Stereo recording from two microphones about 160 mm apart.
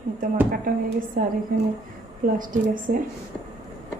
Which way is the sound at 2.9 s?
70° right (ahead or behind).